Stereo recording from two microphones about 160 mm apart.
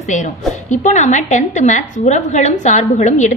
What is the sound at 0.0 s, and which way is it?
A woman's voice, 50° left (ahead or behind).